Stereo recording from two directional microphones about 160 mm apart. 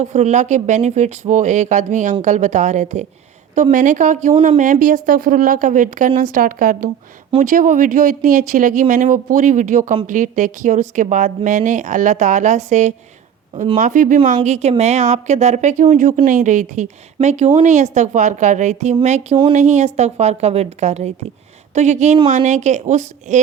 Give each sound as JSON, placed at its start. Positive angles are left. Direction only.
{"t": 0.0, "sound": "speech", "side_deg": -45}